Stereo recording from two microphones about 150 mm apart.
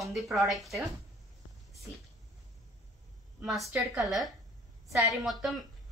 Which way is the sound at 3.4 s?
Centre (ahead or behind).